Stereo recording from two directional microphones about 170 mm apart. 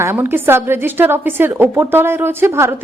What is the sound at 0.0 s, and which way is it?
A woman's voice, 15° right (ahead or behind).